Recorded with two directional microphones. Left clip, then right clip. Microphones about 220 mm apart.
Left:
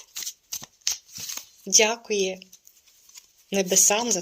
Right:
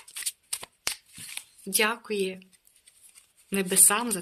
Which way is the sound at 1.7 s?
20° right (ahead or behind).